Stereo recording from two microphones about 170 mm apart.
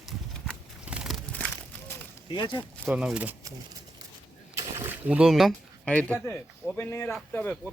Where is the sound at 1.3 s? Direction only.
10° left (ahead or behind).